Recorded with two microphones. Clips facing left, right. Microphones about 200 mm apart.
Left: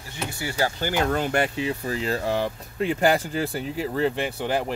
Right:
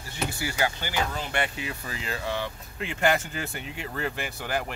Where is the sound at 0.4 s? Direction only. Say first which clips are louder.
Left 5 dB; 30° left (ahead or behind).